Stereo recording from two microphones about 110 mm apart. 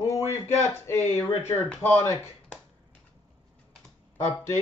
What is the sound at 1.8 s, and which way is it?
Speech, 20° left (ahead or behind).